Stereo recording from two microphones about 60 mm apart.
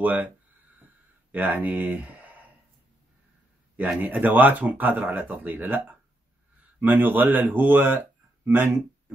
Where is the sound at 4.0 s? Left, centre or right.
Right.